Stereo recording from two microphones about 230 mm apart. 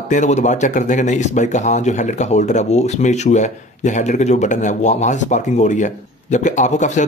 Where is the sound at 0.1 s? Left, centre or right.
Left.